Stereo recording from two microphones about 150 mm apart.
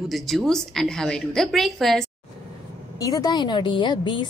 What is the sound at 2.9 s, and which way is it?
A woman's voice, 25° left (ahead or behind).